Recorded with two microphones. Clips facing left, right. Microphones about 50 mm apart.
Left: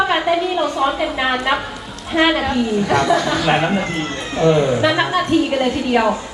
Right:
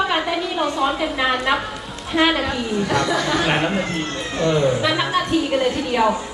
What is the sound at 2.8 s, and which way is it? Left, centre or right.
A woman's voice, centre.